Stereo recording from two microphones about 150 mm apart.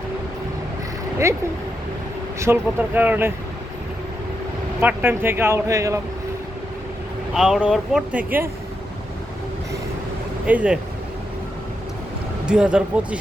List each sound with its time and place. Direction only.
2.4 s speech: 15° right (ahead or behind)
4.8 s speech: 15° right (ahead or behind)
7.3 s speech: 5° right (ahead or behind)
10.4 s speech: 10° right (ahead or behind)
12.5 s speech: 5° right (ahead or behind)